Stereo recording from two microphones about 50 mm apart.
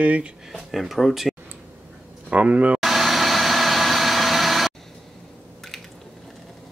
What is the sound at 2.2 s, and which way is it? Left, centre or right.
Speech, right.